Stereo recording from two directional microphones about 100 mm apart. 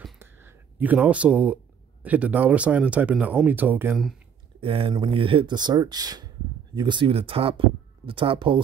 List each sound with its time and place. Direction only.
0.2 s a sound: 25° right (ahead or behind)
2.0 s speech: 15° right (ahead or behind)
4.6 s speech: 65° right (ahead or behind)